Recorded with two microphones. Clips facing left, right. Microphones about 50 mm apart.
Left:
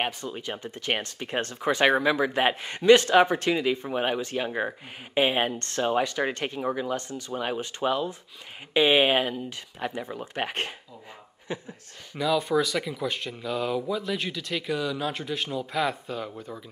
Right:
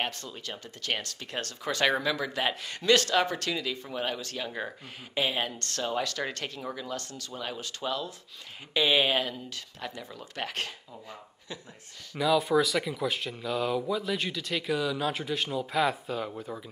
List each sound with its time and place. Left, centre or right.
0.0 s speech: left
12.2 s speech: centre